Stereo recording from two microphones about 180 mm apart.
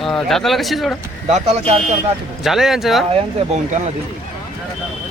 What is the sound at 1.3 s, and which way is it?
Speech, 40° right (ahead or behind).